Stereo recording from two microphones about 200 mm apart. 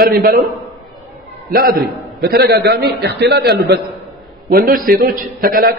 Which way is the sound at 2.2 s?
55° right (ahead or behind).